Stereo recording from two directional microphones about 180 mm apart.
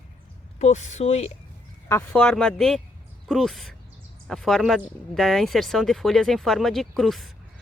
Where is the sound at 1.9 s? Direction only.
10° left (ahead or behind).